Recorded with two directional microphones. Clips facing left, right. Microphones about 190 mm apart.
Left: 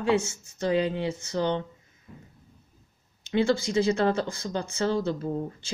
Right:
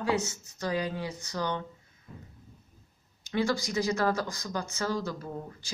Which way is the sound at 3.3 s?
25° left (ahead or behind).